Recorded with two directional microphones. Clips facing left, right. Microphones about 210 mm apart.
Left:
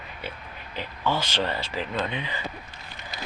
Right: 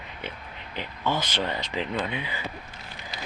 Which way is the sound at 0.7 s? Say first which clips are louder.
Left 1 dB; 15° right (ahead or behind).